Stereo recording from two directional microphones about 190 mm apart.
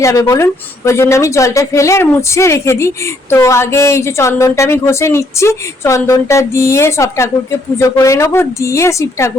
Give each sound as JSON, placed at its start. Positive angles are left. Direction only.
{"t": 0.0, "sound": "a woman's voice", "side_deg": 15}